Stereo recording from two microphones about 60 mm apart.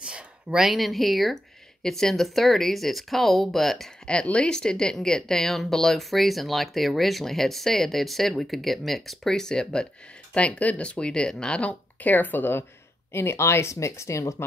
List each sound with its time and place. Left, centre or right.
0.0 s speech: centre
4.1 s speech: centre
12.0 s speech: left
13.1 s speech: left